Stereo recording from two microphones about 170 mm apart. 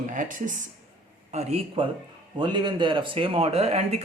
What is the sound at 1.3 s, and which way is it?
Speech, 40° right (ahead or behind).